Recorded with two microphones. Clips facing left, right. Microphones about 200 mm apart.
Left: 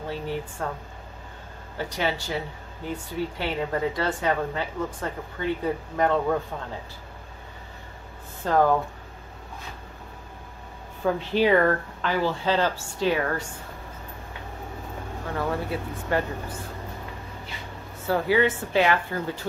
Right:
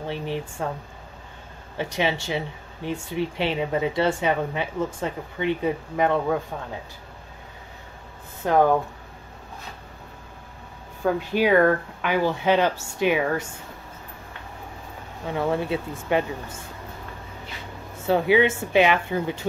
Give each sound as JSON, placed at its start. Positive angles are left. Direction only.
{"t": 0.1, "sound": "speech", "side_deg": -20}
{"t": 1.8, "sound": "speech", "side_deg": -20}
{"t": 8.4, "sound": "speech", "side_deg": -15}
{"t": 11.1, "sound": "speech", "side_deg": -10}
{"t": 15.2, "sound": "speech", "side_deg": -20}
{"t": 18.0, "sound": "speech", "side_deg": -20}